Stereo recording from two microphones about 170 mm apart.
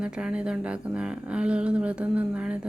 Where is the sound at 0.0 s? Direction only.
5° right (ahead or behind).